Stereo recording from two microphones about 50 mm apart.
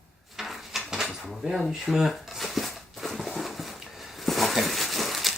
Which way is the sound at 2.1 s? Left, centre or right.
Centre.